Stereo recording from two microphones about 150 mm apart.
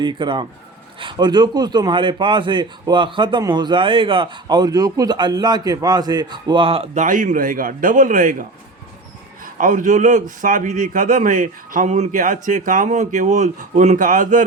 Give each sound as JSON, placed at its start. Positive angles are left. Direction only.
{"t": 0.0, "sound": "speech", "side_deg": -30}
{"t": 9.6, "sound": "a man's voice", "side_deg": -60}